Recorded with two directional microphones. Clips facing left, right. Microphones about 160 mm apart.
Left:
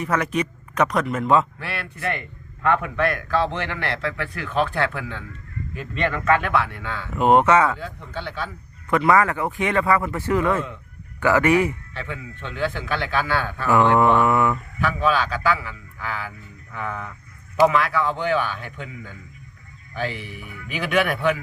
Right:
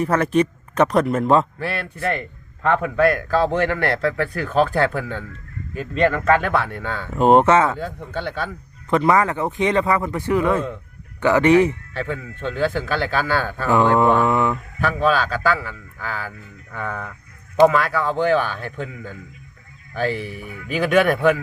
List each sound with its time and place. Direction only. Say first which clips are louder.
0.0 s speech: right 5 dB; 30° right (ahead or behind)
7.8 s a man's voice: right 5 dB; 45° right (ahead or behind)
8.9 s speech: right 1 dB; 20° right (ahead or behind)
11.9 s speech: right 6 dB; 45° right (ahead or behind)
13.7 s speech: right 1 dB; 20° right (ahead or behind)
14.8 s speech: right 3 dB; 40° right (ahead or behind)